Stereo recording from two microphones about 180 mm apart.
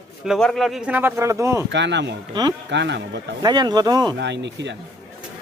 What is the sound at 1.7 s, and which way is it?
Speech, 75° right (ahead or behind).